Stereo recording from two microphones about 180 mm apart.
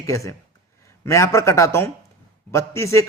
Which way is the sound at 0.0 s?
20° left (ahead or behind).